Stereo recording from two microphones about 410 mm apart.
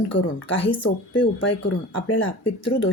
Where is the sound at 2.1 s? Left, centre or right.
Left.